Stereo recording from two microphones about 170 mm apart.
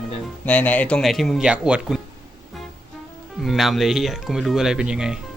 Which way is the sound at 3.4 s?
Centre (ahead or behind).